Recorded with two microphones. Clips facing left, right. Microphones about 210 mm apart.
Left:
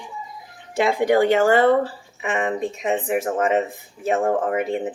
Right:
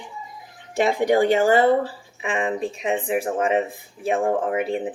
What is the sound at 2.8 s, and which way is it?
Speech, 10° right (ahead or behind).